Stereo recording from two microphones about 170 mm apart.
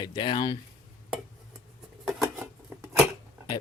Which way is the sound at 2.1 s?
5° right (ahead or behind).